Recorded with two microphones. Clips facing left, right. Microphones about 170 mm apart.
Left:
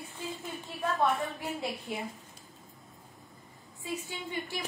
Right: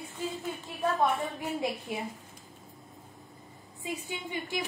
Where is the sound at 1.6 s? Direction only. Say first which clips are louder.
Right 3 dB; 10° right (ahead or behind).